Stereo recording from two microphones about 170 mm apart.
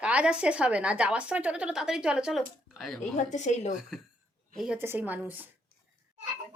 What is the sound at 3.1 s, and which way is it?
Speech, 45° left (ahead or behind).